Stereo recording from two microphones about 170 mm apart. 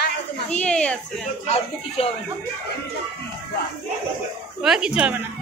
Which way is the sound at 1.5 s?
35° left (ahead or behind).